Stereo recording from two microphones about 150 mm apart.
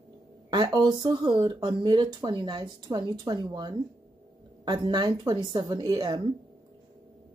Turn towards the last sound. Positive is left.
turn(degrees=-30)  # may be behind; listen again after turning